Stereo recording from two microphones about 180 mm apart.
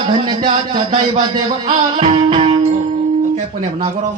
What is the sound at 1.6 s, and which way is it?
Music, 35° right (ahead or behind).